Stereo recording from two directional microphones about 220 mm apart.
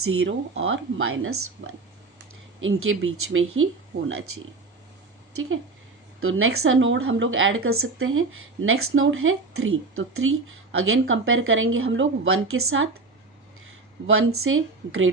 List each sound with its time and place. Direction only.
0.0 s speech: 70° right (ahead or behind)
6.1 s speech: 70° right (ahead or behind)
14.1 s speech: 75° right (ahead or behind)